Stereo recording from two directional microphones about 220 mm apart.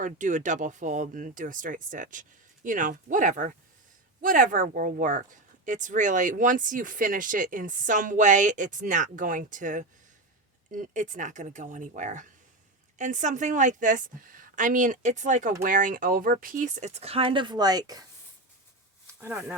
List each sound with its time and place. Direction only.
0.0 s speech: 35° right (ahead or behind); by 18.0 s 15° right (ahead or behind)
19.2 s speech: 10° right (ahead or behind)